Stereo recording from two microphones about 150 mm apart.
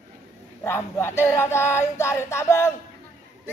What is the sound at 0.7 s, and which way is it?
Battle cry, 15° left (ahead or behind).